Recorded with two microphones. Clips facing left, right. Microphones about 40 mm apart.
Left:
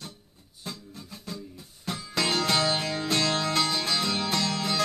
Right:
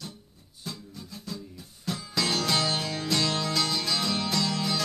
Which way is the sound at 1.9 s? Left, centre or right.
Left.